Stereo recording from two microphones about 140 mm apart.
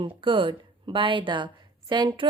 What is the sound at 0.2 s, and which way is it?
A woman's voice, 40° right (ahead or behind).